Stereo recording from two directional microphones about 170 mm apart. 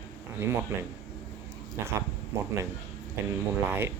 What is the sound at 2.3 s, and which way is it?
Speech, 15° right (ahead or behind).